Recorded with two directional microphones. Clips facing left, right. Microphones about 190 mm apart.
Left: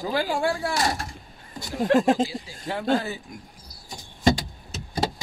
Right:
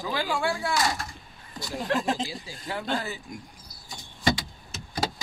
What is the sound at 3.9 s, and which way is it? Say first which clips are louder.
Power windows: left 5 dB; 40° left (ahead or behind).